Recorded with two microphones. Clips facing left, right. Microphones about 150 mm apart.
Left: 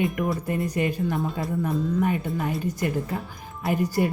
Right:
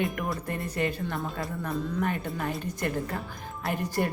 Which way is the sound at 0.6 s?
10° left (ahead or behind).